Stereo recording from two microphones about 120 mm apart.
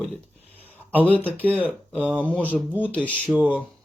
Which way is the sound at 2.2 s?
10° left (ahead or behind).